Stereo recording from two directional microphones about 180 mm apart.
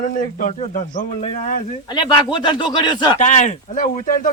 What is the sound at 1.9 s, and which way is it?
Speech, 25° left (ahead or behind).